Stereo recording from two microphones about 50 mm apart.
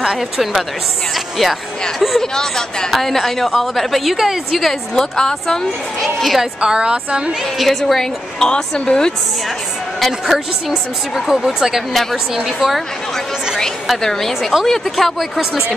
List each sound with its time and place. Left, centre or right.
0.0 s a woman's voice: centre
6.0 s a woman's voice: centre
6.6 s a woman's voice: centre
7.5 s a woman's voice: centre
9.9 s a woman's voice: centre
14.0 s a woman's voice: centre